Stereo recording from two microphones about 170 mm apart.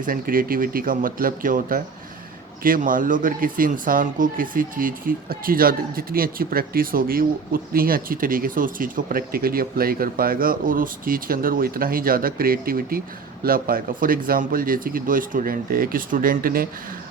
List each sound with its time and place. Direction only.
0.0 s speech: 55° right (ahead or behind)